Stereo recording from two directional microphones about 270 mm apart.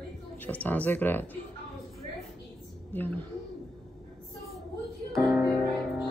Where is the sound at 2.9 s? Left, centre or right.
Centre.